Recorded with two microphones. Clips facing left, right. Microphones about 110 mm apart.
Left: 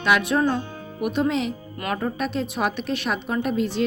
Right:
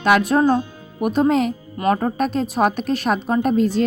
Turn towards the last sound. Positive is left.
turn(degrees=-40)  # may be behind; listen again after turning